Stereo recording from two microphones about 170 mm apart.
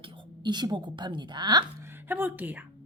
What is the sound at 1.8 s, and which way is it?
Speech, 10° right (ahead or behind).